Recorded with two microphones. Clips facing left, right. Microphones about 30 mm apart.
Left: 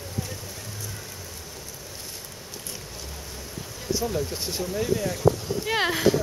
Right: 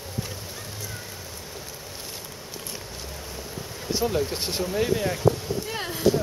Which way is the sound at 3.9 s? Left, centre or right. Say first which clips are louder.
Right 2 dB; right.